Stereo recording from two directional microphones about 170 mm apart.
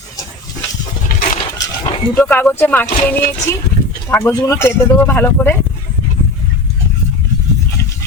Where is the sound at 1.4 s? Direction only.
25° left (ahead or behind).